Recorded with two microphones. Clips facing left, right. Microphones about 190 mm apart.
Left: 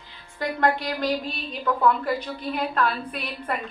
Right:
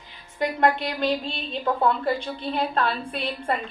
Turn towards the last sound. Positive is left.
turn(degrees=-25)  # may be behind; listen again after turning